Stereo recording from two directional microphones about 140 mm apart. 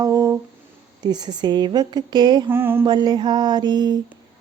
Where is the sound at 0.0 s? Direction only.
25° right (ahead or behind).